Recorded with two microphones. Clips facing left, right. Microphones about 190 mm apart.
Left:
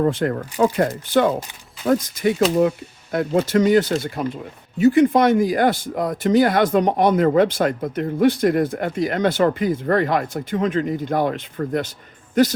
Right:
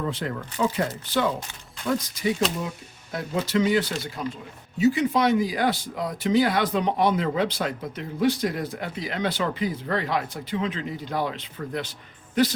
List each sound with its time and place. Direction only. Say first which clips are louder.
0.0 s speech: left 9 dB; 50° left (ahead or behind)